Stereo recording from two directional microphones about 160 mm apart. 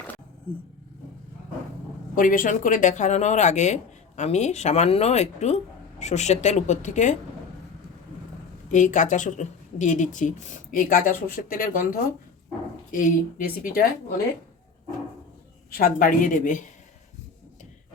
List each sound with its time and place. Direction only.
2.1 s speech: 60° left (ahead or behind)
8.7 s speech: 50° left (ahead or behind)
15.8 s speech: 60° left (ahead or behind)